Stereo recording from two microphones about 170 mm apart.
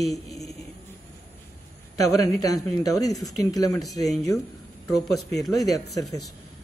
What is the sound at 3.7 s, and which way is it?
Speech, centre (ahead or behind).